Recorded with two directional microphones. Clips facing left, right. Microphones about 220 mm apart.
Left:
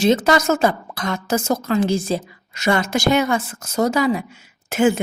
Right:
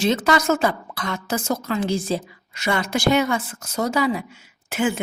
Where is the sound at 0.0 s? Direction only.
45° left (ahead or behind).